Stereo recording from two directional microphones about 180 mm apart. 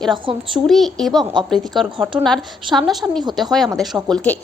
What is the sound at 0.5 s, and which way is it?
Speech, centre (ahead or behind).